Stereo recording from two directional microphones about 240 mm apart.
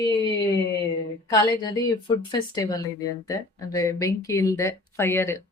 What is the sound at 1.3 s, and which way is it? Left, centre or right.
Speech, centre.